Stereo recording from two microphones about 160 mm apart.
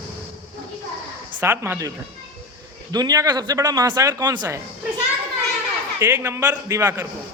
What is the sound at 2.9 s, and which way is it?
Speech, 25° right (ahead or behind).